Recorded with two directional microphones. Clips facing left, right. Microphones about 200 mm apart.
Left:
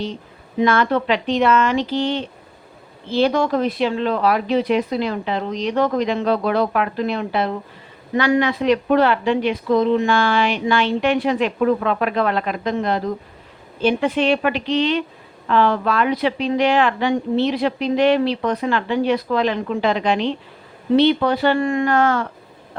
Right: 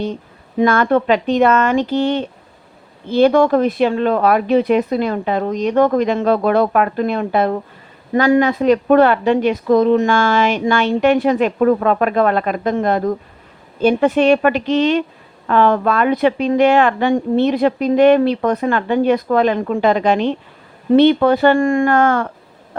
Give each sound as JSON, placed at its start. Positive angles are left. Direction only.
{"t": 0.6, "sound": "a woman's voice", "side_deg": -50}